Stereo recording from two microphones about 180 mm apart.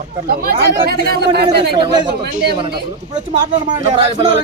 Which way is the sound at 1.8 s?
25° right (ahead or behind).